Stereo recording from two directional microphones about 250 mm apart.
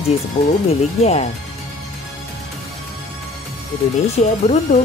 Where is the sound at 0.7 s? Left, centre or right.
Left.